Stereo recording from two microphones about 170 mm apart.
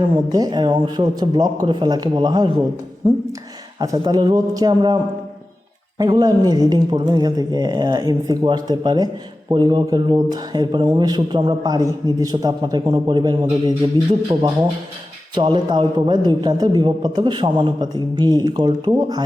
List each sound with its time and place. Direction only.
0.3 s speech: 25° right (ahead or behind)
3.8 s speech: 25° right (ahead or behind)
6.1 s speech: 25° right (ahead or behind)